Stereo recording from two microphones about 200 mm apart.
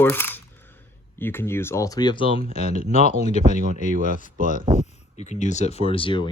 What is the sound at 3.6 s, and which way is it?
Speech, 40° right (ahead or behind).